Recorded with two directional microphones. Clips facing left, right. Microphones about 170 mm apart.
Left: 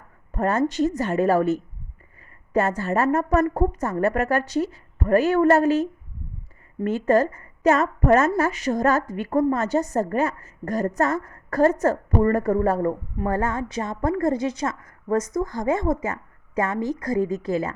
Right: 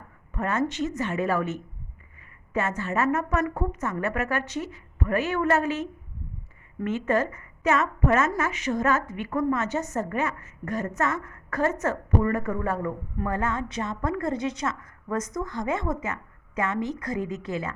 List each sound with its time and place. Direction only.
0.3 s a woman's voice: 35° left (ahead or behind)